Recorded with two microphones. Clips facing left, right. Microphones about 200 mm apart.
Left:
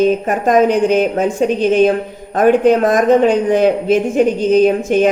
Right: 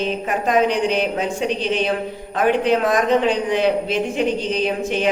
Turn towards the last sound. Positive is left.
turn(degrees=45)  # may be behind; listen again after turning